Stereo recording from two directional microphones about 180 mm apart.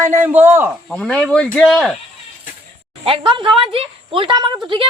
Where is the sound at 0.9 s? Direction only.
5° left (ahead or behind).